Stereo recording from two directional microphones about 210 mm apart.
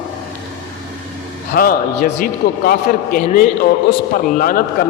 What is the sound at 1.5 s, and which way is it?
A man's voice, 40° left (ahead or behind).